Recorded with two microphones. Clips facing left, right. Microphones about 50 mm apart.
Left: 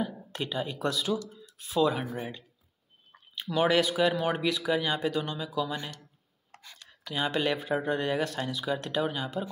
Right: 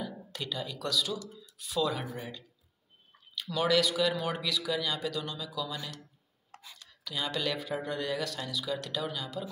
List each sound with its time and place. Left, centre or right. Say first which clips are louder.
0.0 s speech: left 5 dB; left
3.3 s speech: left 3 dB; left
6.5 s a sound: even; centre
6.9 s speech: left 5 dB; left